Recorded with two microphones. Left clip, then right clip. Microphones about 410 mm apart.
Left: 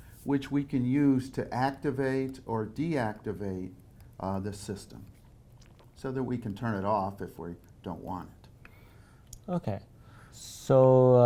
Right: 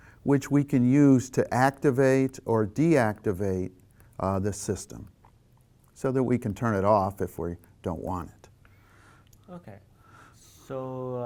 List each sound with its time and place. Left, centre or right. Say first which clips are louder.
0.3 s speech: right 6 dB; right
6.0 s speech: right 8 dB; right
9.3 s speech: left 12 dB; left